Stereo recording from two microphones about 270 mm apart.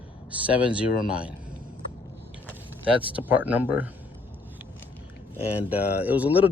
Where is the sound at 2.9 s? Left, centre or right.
Centre.